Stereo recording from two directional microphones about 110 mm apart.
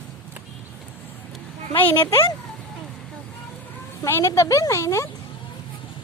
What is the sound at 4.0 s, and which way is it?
Speech, 25° left (ahead or behind).